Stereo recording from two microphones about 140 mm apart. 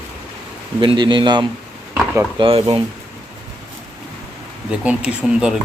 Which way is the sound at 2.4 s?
40° right (ahead or behind).